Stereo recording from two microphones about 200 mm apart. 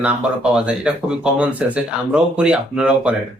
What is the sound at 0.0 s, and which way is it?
Speech, 5° right (ahead or behind).